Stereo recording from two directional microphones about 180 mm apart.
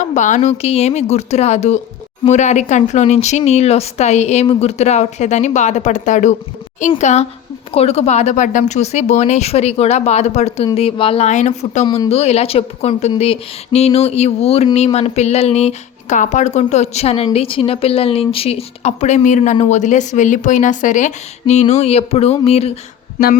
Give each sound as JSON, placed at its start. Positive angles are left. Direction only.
{"t": 0.0, "sound": "speech", "side_deg": 45}